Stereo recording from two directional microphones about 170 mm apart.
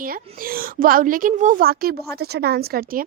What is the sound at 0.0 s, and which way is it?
A woman's voice, 55° right (ahead or behind).